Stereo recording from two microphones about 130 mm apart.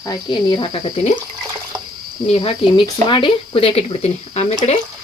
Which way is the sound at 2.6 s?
45° left (ahead or behind).